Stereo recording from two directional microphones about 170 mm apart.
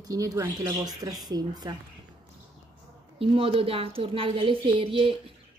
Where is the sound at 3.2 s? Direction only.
30° right (ahead or behind).